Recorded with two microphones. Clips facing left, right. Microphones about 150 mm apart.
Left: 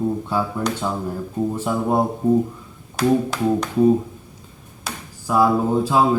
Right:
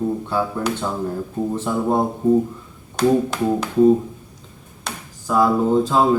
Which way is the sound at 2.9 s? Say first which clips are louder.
Right 1 dB; centre (ahead or behind).